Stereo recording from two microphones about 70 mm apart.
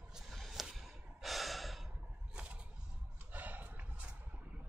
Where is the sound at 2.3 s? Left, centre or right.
Centre.